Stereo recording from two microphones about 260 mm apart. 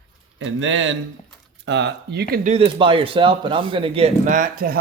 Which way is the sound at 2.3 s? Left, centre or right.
Right.